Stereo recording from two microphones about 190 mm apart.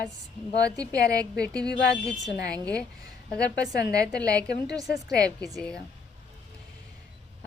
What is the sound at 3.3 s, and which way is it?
Female singing, 5° left (ahead or behind).